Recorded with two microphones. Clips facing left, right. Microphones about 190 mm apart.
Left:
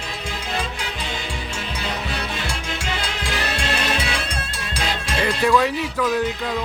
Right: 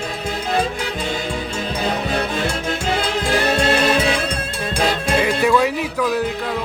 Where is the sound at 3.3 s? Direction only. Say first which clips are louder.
Right 9 dB; 50° right (ahead or behind).